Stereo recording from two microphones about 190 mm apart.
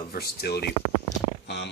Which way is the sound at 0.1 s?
55° left (ahead or behind).